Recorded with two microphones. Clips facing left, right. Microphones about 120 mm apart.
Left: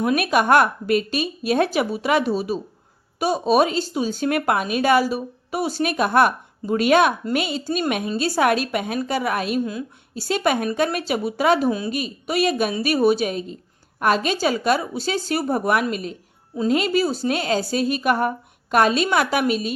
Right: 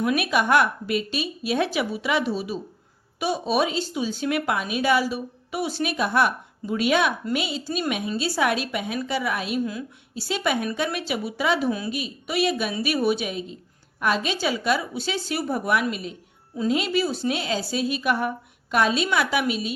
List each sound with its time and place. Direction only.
0.0 s a woman's voice: 45° left (ahead or behind)